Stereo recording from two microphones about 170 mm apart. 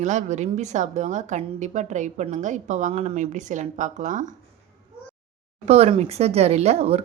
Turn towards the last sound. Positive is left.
turn(degrees=-40)  # may be behind; listen again after turning